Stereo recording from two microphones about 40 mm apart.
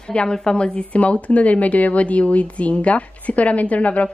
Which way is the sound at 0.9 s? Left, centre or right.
Left.